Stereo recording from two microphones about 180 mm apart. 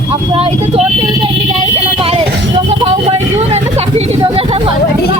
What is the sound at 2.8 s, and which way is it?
Vehicle, 35° right (ahead or behind).